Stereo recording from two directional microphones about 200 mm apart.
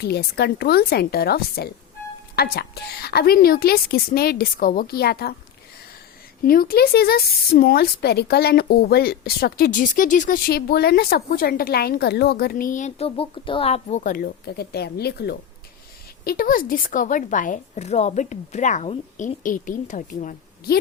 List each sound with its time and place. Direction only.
0.0 s speech: 55° left (ahead or behind)
6.4 s speech: 45° left (ahead or behind)